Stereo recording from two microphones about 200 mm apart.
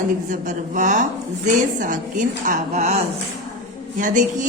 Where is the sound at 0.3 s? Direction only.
40° right (ahead or behind).